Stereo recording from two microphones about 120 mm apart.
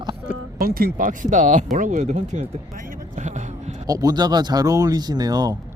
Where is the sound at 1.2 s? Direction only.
90° right.